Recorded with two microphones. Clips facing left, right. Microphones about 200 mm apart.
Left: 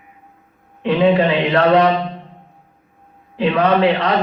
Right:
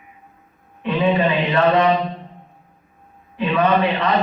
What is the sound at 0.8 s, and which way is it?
A man's voice, 70° left (ahead or behind).